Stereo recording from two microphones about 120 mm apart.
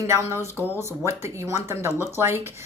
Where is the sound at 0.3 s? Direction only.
20° right (ahead or behind).